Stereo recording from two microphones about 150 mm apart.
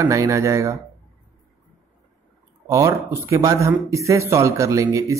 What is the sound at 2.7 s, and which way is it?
Speech, 20° right (ahead or behind).